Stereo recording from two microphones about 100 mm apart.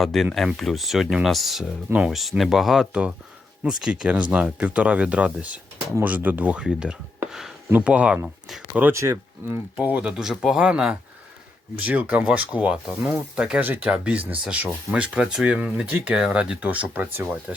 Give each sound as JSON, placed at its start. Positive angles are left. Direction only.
{"t": 0.0, "sound": "speech", "side_deg": 0}
{"t": 7.3, "sound": "a sound", "side_deg": -5}
{"t": 7.7, "sound": "speech", "side_deg": -15}
{"t": 8.8, "sound": "speech", "side_deg": -30}
{"t": 9.7, "sound": "speech", "side_deg": -15}